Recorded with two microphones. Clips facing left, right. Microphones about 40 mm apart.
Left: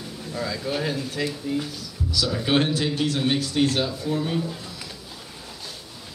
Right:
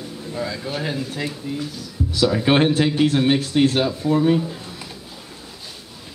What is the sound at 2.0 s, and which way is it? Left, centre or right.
Speech, right.